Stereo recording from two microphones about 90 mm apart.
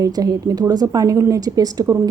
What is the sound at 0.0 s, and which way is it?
A woman's voice, 45° right (ahead or behind).